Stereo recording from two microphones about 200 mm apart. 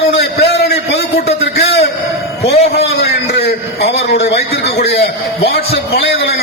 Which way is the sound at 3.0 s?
55° left (ahead or behind).